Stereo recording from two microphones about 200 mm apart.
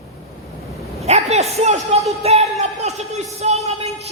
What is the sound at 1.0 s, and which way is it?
A man's voice, 30° right (ahead or behind).